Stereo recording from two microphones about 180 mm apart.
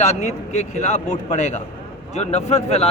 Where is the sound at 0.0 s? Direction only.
40° left (ahead or behind).